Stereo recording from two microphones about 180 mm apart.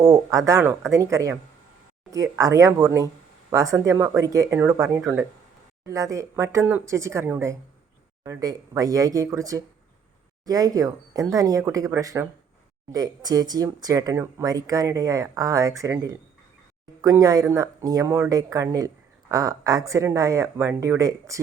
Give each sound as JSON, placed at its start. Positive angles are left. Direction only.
{"t": 0.0, "sound": "speech", "side_deg": -20}